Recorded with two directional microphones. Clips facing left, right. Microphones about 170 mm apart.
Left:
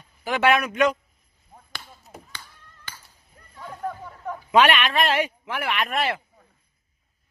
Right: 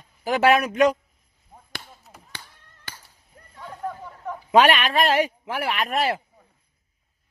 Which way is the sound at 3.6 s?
5° left (ahead or behind).